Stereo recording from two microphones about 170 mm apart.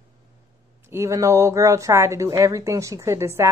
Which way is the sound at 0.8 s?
15° right (ahead or behind).